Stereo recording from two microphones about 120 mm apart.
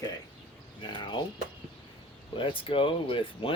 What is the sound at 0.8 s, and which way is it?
Speech, 40° left (ahead or behind).